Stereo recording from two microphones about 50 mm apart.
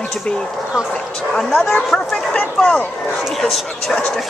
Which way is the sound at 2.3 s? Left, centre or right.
Left.